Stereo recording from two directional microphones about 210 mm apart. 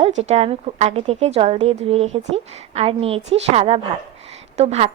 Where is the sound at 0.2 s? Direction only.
30° right (ahead or behind).